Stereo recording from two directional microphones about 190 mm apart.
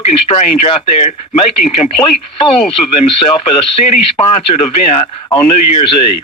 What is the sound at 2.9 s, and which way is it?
Speech, 30° left (ahead or behind).